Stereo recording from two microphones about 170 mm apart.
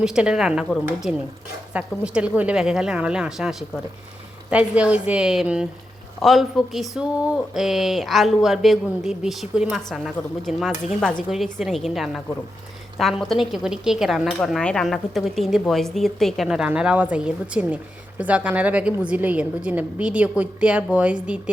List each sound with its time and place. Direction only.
0.0 s a woman's voice: 5° right (ahead or behind)